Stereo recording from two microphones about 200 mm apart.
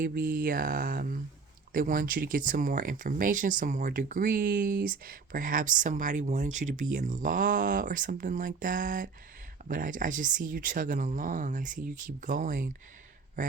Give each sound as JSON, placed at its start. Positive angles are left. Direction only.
{"t": 0.0, "sound": "speech", "side_deg": -45}